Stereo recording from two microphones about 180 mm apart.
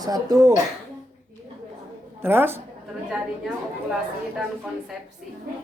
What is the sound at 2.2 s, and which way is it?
A woman's voice, 10° right (ahead or behind).